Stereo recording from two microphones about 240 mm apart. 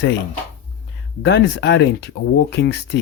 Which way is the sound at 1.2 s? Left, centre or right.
Left.